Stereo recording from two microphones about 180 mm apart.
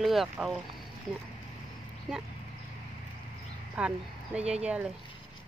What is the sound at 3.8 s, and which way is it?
Speech, 5° right (ahead or behind).